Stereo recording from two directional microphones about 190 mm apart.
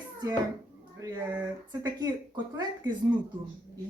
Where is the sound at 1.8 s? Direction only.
20° right (ahead or behind).